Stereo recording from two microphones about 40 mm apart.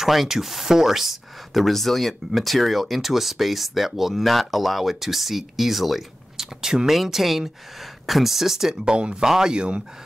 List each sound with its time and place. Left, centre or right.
0.0 s speech: centre
8.8 s speech: right